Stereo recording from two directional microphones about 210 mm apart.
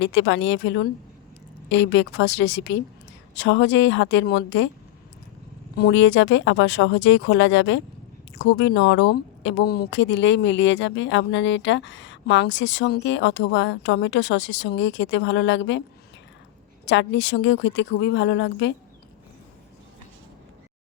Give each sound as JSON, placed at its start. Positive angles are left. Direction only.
{"t": 0.0, "sound": "speech", "side_deg": 60}
{"t": 5.7, "sound": "speech", "side_deg": 55}
{"t": 16.8, "sound": "speech", "side_deg": 60}